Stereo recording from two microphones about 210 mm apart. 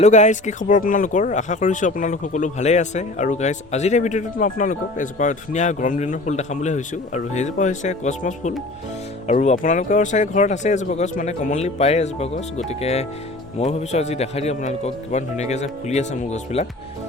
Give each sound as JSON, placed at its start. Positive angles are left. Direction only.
{"t": 0.0, "sound": "speech", "side_deg": 35}